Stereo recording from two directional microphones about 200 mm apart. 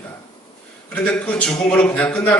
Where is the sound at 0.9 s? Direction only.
5° left (ahead or behind).